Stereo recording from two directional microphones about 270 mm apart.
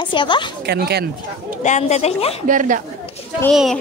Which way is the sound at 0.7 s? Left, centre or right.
Right.